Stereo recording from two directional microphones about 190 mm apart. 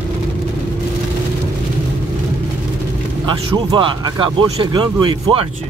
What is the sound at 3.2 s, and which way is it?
Speech, 25° right (ahead or behind).